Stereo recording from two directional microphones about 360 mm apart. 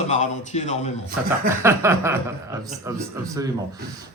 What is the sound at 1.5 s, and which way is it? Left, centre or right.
Speech, centre.